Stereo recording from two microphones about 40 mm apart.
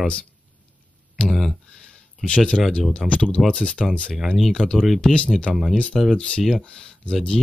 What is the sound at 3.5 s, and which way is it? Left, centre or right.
Speech, left.